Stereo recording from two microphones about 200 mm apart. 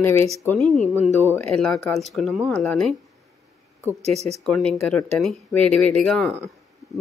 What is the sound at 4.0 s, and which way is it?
Speech, 30° right (ahead or behind).